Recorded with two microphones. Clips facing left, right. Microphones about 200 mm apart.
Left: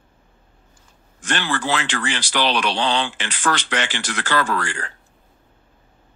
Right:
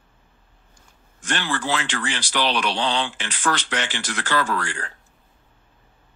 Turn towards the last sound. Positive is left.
turn(degrees=85)